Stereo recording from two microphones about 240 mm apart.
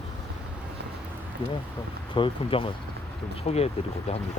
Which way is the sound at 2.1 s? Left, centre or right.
Left.